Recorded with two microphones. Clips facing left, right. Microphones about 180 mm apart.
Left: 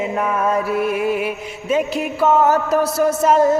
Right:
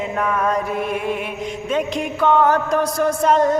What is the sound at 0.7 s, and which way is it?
Mantra, 5° left (ahead or behind).